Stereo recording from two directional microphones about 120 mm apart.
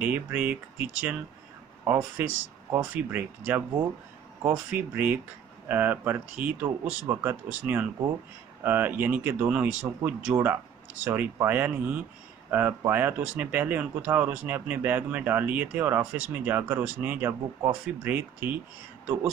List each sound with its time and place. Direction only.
0.0 s speech: 15° right (ahead or behind)
1.9 s speech: 20° right (ahead or behind)
4.6 s speech: 15° right (ahead or behind)